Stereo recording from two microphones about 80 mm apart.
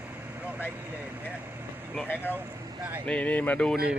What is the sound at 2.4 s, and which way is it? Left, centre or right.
Speech, right.